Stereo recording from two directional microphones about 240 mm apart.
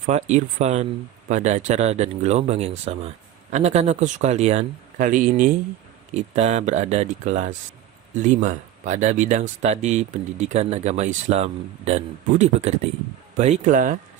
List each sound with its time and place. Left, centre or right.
0.0 s speech: right